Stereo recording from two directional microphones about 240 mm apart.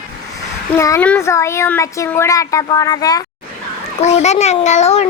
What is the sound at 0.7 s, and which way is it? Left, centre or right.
A child's voice, centre.